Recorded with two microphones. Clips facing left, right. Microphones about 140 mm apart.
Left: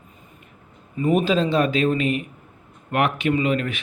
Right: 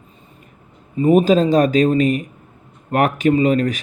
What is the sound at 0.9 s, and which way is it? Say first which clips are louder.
Speech: right 6 dB; 35° right (ahead or behind).